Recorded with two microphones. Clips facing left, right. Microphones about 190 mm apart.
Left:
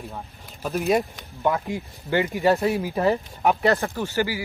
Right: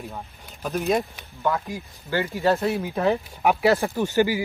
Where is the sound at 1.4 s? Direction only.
20° left (ahead or behind).